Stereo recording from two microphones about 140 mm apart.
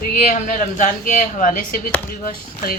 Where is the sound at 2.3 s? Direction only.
90° left.